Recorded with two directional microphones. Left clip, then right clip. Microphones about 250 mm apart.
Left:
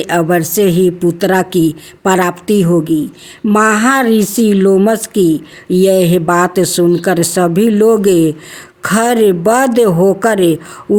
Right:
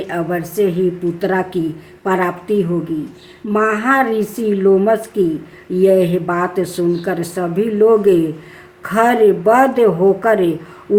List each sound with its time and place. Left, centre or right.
0.0 s speech: left